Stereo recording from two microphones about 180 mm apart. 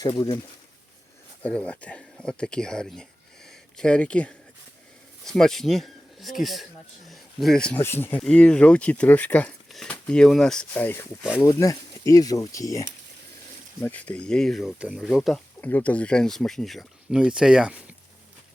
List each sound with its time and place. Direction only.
0.0 s speech: 25° left (ahead or behind)
1.4 s speech: 5° left (ahead or behind)
11.2 s speech: 5° right (ahead or behind)
11.4 s speech: 15° left (ahead or behind)
13.8 s speech: 10° left (ahead or behind)